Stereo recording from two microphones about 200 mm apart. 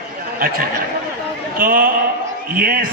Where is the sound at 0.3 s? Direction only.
45° right (ahead or behind).